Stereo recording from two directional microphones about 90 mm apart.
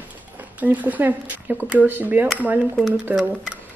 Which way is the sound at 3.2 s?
15° right (ahead or behind).